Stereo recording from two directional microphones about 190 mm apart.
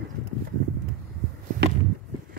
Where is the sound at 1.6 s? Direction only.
55° right (ahead or behind).